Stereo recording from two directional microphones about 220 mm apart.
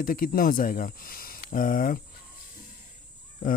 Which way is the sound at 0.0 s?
40° left (ahead or behind).